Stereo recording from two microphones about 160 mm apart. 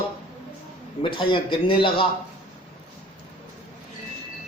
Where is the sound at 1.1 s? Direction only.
30° left (ahead or behind).